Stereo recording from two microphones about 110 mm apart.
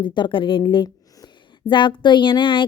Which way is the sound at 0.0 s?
50° left (ahead or behind).